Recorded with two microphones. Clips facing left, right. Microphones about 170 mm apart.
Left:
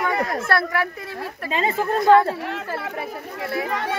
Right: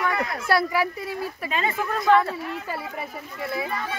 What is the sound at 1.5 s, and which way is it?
Speech, 25° left (ahead or behind).